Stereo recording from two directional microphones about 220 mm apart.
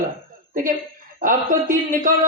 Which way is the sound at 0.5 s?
40° right (ahead or behind).